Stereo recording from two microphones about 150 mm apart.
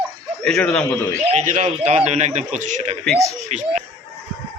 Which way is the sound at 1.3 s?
50° right (ahead or behind).